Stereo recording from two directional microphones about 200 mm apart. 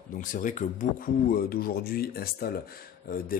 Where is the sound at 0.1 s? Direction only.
40° left (ahead or behind).